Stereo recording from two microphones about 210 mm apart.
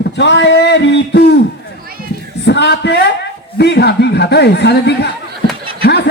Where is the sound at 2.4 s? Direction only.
55° left (ahead or behind).